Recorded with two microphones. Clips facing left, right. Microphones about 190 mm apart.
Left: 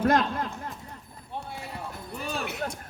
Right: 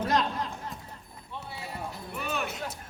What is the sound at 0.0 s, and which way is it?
Speech, 55° left (ahead or behind).